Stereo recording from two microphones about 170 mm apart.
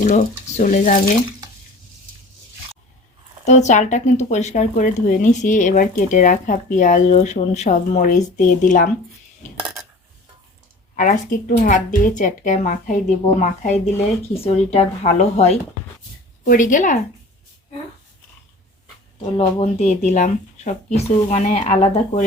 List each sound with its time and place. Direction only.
0.0 s speech: 50° left (ahead or behind)
3.4 s speech: 45° left (ahead or behind)
10.9 s speech: 50° left (ahead or behind)
16.4 s speech: 50° left (ahead or behind)
19.2 s speech: 35° left (ahead or behind)